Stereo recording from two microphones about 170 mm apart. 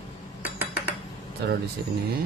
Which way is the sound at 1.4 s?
75° right (ahead or behind).